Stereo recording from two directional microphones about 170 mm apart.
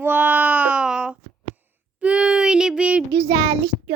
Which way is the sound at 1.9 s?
5° right (ahead or behind).